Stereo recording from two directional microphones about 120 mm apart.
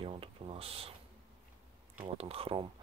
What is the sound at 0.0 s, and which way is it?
Speech, 50° right (ahead or behind).